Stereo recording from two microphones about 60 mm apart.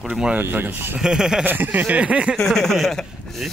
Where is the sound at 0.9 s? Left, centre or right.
Centre.